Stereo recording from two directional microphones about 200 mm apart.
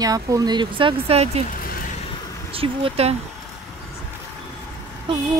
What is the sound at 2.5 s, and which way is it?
Speech, 25° right (ahead or behind).